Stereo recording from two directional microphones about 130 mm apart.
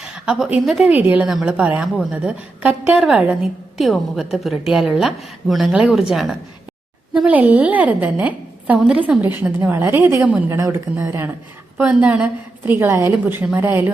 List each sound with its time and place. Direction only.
0.0 s a woman's voice: 5° right (ahead or behind)
0.9 s a woman's voice: 15° right (ahead or behind)